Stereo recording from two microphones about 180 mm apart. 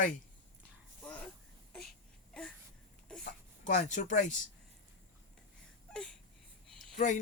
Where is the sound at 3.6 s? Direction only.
45° left (ahead or behind).